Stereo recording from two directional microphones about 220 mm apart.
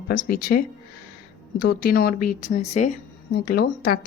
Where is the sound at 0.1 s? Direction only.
40° left (ahead or behind).